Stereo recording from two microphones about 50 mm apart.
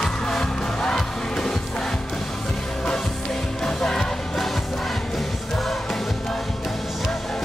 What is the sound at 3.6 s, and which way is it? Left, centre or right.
Music, centre.